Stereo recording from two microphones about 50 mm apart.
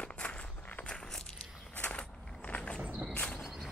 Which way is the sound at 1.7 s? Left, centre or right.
Left.